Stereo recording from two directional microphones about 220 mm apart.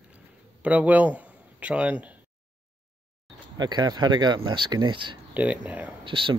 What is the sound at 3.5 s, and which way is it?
Speech, 20° right (ahead or behind).